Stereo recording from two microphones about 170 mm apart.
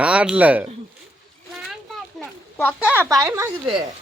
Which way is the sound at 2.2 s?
10° left (ahead or behind).